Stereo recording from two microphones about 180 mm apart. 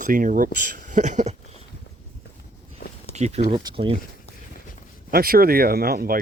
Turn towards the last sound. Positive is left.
turn(degrees=-55)  # may be behind; listen again after turning